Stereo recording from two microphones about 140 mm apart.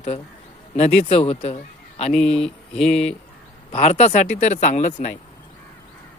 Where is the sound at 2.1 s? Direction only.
5° left (ahead or behind).